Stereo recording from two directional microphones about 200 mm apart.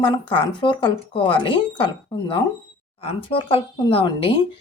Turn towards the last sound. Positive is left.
turn(degrees=25)  # may be behind; listen again after turning